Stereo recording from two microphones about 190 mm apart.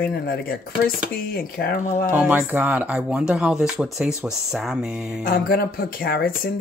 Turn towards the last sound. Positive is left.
turn(degrees=55)  # may be behind; listen again after turning